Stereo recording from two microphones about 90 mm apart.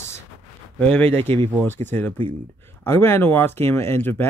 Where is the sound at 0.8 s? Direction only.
15° left (ahead or behind).